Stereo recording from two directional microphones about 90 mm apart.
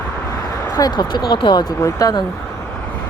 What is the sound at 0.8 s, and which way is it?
Speech, 50° left (ahead or behind).